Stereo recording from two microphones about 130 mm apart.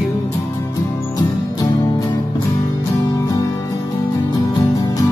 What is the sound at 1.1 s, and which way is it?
Music, 25° left (ahead or behind).